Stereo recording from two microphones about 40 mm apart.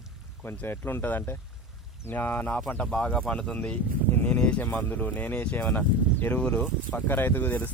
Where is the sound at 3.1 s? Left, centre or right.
Centre.